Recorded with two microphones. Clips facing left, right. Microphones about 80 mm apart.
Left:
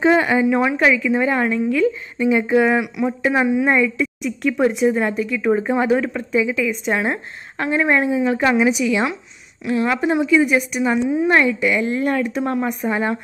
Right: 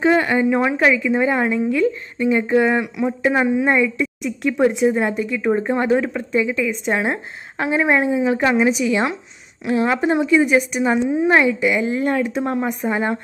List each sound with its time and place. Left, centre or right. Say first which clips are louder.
0.0 s a woman's voice: left 1 dB; centre
0.4 s speech: even; centre
2.1 s speech: left 1 dB; centre
5.9 s speech: right 1 dB; centre
6.3 s speech: left 1 dB; centre
7.5 s speech: even; centre